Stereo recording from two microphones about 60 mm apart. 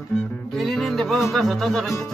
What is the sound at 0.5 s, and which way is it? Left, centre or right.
Music, centre.